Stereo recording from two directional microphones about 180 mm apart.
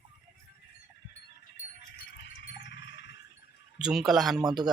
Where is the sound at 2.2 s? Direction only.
70° left (ahead or behind).